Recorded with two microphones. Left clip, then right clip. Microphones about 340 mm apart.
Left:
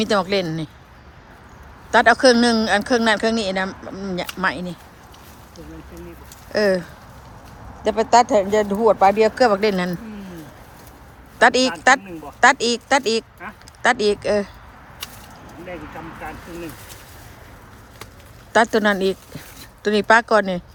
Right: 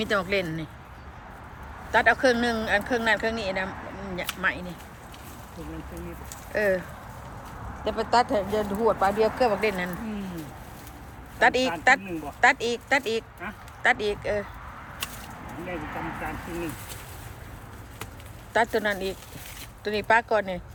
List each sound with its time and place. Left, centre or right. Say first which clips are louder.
0.0 s speech: left 6 dB; centre
1.9 s speech: left 7 dB; centre
6.5 s speech: left 6 dB; centre
7.9 s speech: left 8 dB; centre
11.3 s speech: left 6 dB; centre
18.5 s speech: left 8 dB; centre